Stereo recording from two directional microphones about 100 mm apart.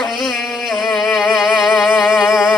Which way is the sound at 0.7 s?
Centre (ahead or behind).